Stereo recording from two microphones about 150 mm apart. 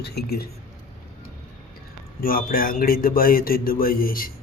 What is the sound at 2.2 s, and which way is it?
Speech, 75° left (ahead or behind).